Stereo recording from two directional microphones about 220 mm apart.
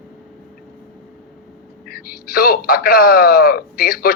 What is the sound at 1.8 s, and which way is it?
Speech, 45° left (ahead or behind).